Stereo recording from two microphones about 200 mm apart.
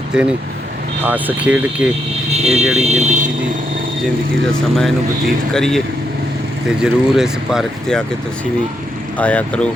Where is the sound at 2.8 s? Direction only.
35° right (ahead or behind).